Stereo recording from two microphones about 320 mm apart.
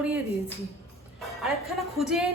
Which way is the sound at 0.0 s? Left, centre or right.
Centre.